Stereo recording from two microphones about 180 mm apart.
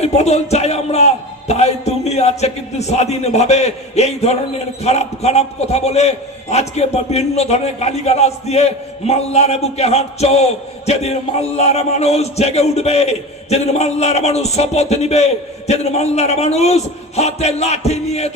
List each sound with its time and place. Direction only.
0.0 s a man's voice: 35° left (ahead or behind)